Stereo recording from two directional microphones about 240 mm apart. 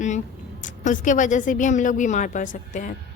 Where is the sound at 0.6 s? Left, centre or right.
Left.